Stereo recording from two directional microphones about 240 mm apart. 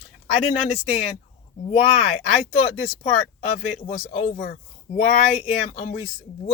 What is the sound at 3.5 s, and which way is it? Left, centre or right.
Speech, left.